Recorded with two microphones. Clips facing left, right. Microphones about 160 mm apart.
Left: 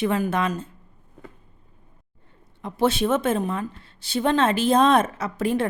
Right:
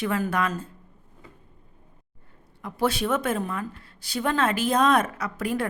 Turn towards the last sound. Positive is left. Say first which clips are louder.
# left 4 dB
turn(degrees=25)  # may be behind; listen again after turning